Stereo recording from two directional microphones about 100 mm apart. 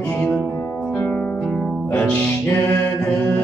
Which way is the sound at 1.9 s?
20° left (ahead or behind).